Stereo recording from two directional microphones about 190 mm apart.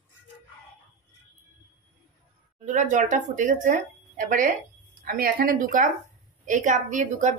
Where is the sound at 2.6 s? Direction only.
40° right (ahead or behind).